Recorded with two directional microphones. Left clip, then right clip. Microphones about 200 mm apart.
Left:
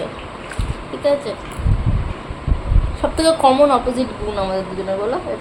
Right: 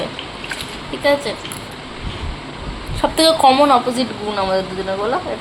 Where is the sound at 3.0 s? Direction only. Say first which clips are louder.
Right 2 dB; 10° right (ahead or behind).